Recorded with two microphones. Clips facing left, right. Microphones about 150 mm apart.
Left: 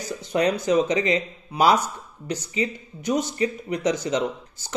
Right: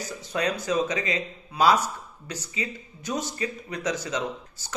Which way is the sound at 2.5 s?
25° left (ahead or behind).